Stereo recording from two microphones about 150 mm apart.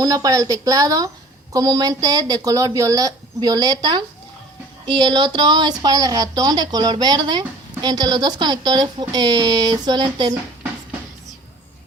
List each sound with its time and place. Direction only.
0.0 s a woman's voice: 25° right (ahead or behind)